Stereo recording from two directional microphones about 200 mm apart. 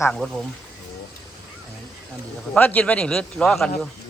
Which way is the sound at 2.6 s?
10° left (ahead or behind).